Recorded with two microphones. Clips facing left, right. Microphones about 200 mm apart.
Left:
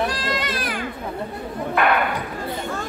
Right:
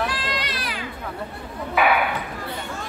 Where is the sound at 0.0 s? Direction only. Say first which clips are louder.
Left 3 dB; 45° left (ahead or behind).